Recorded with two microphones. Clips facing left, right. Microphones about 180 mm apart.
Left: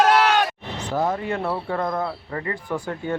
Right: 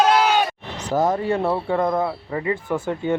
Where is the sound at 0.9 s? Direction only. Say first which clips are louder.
Right 4 dB; 40° right (ahead or behind).